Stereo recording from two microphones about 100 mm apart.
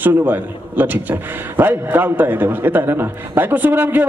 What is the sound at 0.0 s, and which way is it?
A man's voice, 20° right (ahead or behind).